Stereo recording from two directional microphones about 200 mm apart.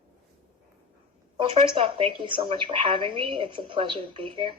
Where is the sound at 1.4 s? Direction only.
25° right (ahead or behind).